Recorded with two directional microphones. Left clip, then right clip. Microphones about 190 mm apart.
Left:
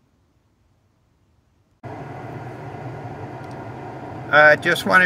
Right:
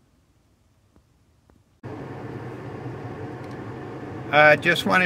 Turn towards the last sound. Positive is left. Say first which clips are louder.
# left 3 dB
turn(degrees=0)  # may be behind; listen again after turning